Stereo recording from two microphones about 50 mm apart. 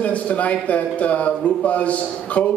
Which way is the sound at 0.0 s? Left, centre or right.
Left.